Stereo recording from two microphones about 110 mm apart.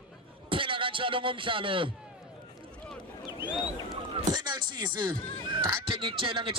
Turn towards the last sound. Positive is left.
turn(degrees=-50)  # may be behind; listen again after turning